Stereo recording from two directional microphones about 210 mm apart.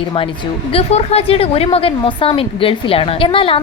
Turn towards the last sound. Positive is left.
turn(degrees=25)  # may be behind; listen again after turning